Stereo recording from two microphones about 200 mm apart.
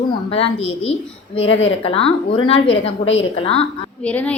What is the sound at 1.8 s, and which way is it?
Speech, 30° left (ahead or behind).